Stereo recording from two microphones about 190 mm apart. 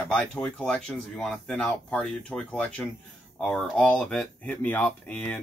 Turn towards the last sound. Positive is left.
turn(degrees=5)  # may be behind; listen again after turning